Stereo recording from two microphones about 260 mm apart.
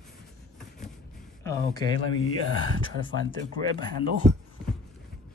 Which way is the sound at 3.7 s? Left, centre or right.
Right.